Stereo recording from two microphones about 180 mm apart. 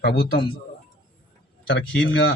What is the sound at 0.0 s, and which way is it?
Speech, 60° left (ahead or behind).